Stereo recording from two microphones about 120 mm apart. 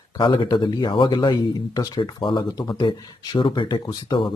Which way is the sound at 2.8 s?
45° left (ahead or behind).